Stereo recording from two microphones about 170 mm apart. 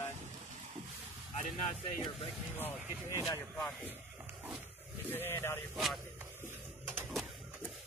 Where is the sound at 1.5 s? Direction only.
30° left (ahead or behind).